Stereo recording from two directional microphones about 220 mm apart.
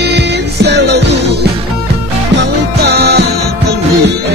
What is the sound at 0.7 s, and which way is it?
Music, 50° right (ahead or behind).